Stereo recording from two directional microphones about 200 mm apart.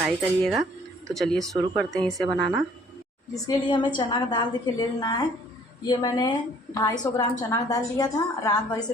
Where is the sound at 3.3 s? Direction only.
25° left (ahead or behind).